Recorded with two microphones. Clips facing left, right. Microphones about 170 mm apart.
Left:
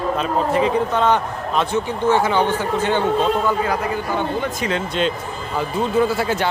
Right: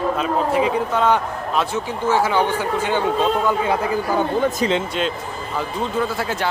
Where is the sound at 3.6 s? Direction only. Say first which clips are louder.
Right 1 dB; 25° right (ahead or behind).